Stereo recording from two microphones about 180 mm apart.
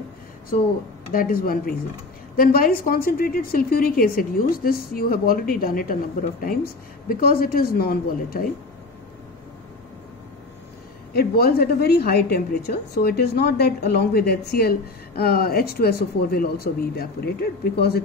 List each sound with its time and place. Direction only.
1.1 s a woman's voice: 55° left (ahead or behind)
11.1 s a woman's voice: 60° left (ahead or behind)